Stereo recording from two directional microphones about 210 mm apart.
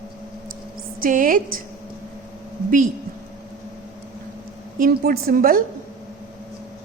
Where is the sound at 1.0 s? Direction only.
40° right (ahead or behind).